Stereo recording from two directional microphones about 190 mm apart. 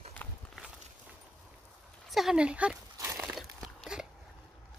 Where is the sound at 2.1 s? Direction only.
Centre (ahead or behind).